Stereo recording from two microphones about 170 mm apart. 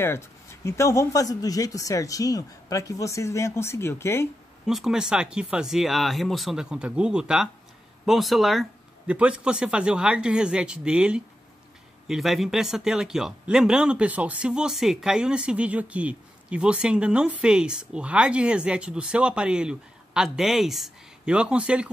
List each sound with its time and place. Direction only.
0.7 s speech: 15° left (ahead or behind)
4.6 s speech: 5° right (ahead or behind)